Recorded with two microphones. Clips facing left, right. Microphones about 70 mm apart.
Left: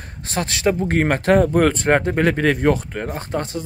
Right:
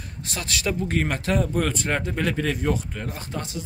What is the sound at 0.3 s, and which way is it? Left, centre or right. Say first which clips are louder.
Speech: left 8 dB; left.